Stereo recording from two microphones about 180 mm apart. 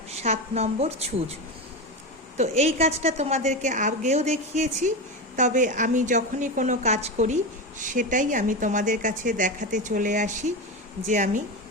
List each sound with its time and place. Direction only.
0.1 s a woman's voice: 35° right (ahead or behind)
2.4 s a woman's voice: 35° right (ahead or behind)